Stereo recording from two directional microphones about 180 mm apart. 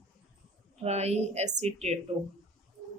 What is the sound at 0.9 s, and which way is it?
A woman's voice, 40° right (ahead or behind).